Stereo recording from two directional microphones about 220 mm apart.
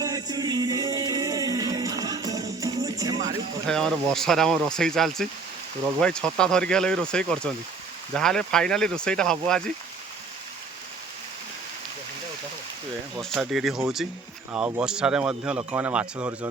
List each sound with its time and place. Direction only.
0.0 s music: 15° right (ahead or behind)
3.7 s speech: centre (ahead or behind)
13.1 s speech: centre (ahead or behind)